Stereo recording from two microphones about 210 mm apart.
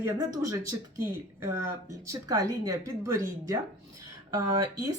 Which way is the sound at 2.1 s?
15° right (ahead or behind).